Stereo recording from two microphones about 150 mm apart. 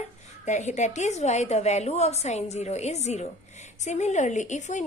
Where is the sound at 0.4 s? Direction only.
50° left (ahead or behind).